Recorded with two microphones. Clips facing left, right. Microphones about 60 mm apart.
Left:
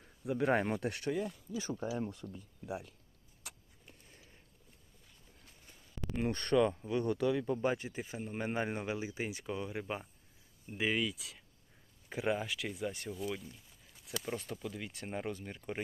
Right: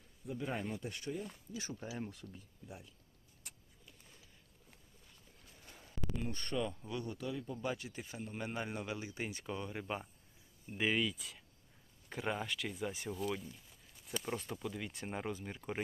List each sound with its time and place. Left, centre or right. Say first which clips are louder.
0.3 s speech: left 9 dB; left
2.6 s speech: left 11 dB; left
3.4 s vehicle: left 6 dB; left
6.1 s speech: left 10 dB; left
7.6 s speech: left 6 dB; left
9.3 s speech: left 3 dB; centre